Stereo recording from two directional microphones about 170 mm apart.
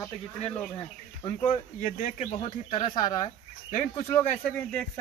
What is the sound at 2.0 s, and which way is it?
Speech, 45° left (ahead or behind).